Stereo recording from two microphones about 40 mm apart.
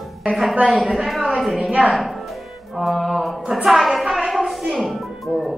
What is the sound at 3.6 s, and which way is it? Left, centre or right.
Speech, centre.